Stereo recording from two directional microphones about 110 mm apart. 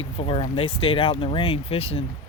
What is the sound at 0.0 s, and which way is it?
Speech, 60° left (ahead or behind).